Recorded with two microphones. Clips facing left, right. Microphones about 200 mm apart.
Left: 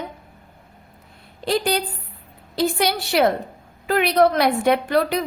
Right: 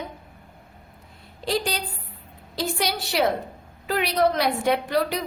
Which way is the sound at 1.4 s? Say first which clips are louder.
Left 5 dB; 60° left (ahead or behind).